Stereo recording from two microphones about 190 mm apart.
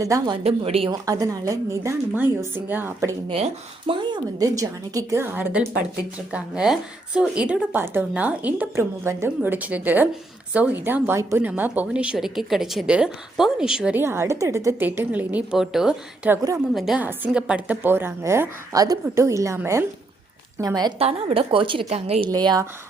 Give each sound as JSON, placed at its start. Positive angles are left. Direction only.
{"t": 0.0, "sound": "a woman's voice", "side_deg": -15}
{"t": 0.4, "sound": "speech", "side_deg": -30}
{"t": 0.9, "sound": "a woman's voice", "side_deg": -20}
{"t": 3.8, "sound": "a woman's voice", "side_deg": -25}
{"t": 22.3, "sound": "a woman's voice", "side_deg": -20}